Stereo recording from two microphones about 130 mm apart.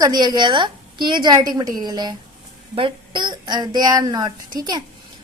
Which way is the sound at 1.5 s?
30° right (ahead or behind).